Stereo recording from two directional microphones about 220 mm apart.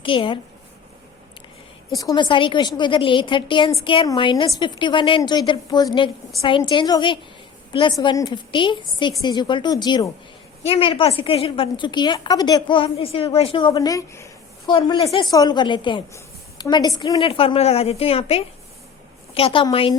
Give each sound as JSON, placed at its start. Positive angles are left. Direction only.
{"t": 0.0, "sound": "a woman's voice", "side_deg": 25}
{"t": 2.0, "sound": "a woman's voice", "side_deg": 20}